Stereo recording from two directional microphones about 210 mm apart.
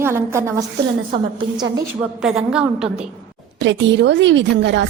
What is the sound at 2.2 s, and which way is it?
Speech, 5° right (ahead or behind).